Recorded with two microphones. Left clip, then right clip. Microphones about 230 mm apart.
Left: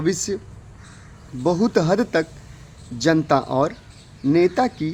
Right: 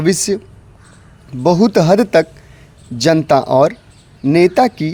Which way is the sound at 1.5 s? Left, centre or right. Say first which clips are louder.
Right 8 dB; right.